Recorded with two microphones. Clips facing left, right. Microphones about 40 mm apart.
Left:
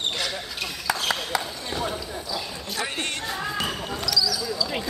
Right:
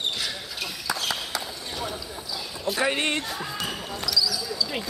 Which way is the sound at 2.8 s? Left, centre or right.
Right.